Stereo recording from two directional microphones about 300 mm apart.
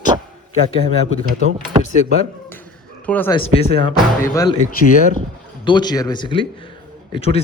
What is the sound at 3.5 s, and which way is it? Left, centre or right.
A man's voice, centre.